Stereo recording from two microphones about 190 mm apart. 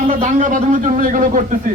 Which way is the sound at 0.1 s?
40° right (ahead or behind).